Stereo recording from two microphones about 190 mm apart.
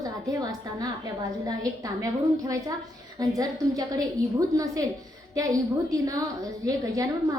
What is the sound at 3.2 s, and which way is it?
A woman's voice, 20° right (ahead or behind).